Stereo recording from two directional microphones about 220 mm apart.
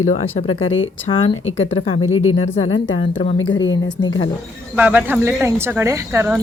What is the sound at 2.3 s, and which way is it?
Speech, 30° left (ahead or behind).